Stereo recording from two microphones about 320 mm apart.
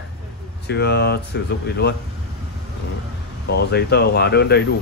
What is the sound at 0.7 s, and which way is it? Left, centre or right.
Speech, left.